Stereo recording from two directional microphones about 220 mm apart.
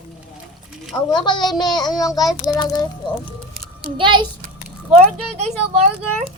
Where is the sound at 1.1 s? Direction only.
20° left (ahead or behind).